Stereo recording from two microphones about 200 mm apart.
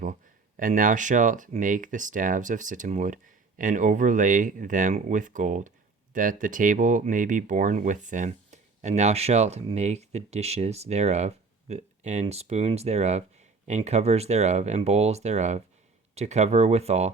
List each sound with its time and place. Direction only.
0.0 s speech: 40° right (ahead or behind)